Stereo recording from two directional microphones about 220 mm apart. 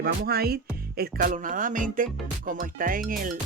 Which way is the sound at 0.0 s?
45° right (ahead or behind).